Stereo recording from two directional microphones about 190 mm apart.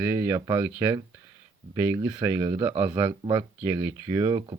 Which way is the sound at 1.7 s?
15° right (ahead or behind).